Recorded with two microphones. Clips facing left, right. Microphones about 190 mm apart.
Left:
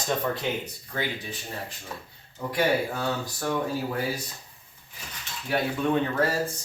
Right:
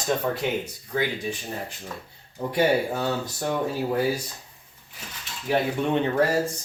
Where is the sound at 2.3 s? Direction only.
20° right (ahead or behind).